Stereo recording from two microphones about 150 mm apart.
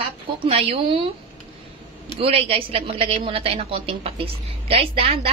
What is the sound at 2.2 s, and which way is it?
A woman's voice, 40° right (ahead or behind).